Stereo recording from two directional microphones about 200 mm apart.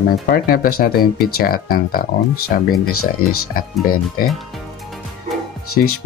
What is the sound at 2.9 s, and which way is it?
Speech, 90° left.